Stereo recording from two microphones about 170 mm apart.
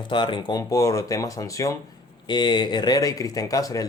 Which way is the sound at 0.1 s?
30° left (ahead or behind).